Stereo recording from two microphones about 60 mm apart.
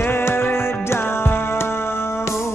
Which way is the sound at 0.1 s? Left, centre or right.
Left.